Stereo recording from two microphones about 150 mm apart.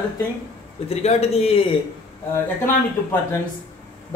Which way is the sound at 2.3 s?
15° left (ahead or behind).